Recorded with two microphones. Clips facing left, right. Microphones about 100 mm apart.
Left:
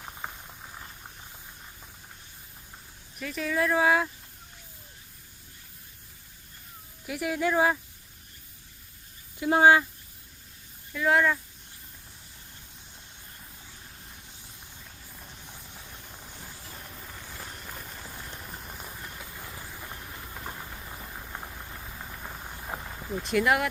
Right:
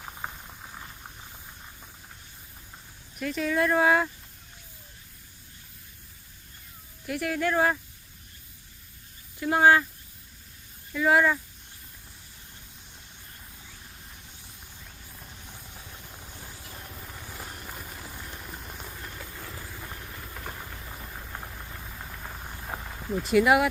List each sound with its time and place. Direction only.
0.0 s boiling: 5° right (ahead or behind)
3.2 s speech: centre (ahead or behind)
7.1 s speech: 10° left (ahead or behind)
9.4 s speech: 15° left (ahead or behind)
10.9 s speech: 5° right (ahead or behind)
15.1 s vehicle: centre (ahead or behind)
20.6 s a sound: 5° left (ahead or behind)